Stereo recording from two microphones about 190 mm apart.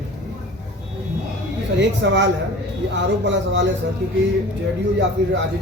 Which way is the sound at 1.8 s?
70° right (ahead or behind).